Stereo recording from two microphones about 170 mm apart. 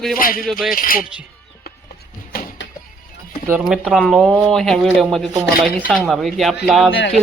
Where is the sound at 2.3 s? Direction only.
60° left (ahead or behind).